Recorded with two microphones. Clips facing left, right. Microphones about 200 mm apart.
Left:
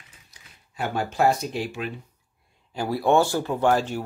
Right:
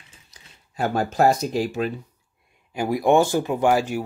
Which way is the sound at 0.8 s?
40° right (ahead or behind).